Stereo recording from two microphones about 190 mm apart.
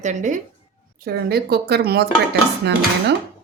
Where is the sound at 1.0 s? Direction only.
55° right (ahead or behind).